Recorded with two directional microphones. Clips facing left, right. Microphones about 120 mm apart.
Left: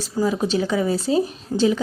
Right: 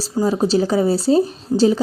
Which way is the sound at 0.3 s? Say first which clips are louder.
Right 5 dB; 35° right (ahead or behind).